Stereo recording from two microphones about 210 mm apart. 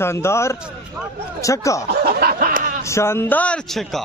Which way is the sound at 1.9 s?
50° right (ahead or behind).